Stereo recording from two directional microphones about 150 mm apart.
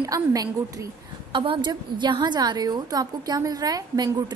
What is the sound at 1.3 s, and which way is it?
A woman's voice, 35° right (ahead or behind).